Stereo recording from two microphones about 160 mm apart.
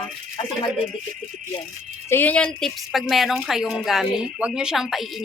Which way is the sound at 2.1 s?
10° left (ahead or behind).